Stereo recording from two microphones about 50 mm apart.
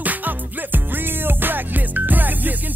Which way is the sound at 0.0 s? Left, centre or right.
Right.